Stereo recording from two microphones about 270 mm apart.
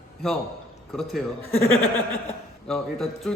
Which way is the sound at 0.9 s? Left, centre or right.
Centre.